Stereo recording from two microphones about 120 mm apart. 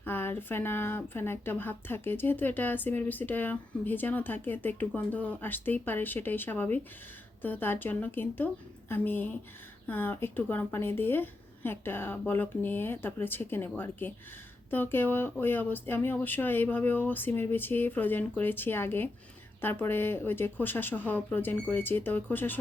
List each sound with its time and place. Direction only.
0.0 s speech: 20° left (ahead or behind)